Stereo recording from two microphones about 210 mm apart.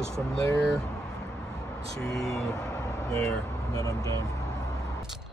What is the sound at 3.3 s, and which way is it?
Speech, 15° left (ahead or behind).